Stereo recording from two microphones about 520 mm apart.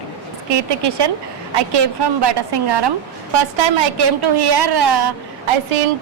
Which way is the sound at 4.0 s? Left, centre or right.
Right.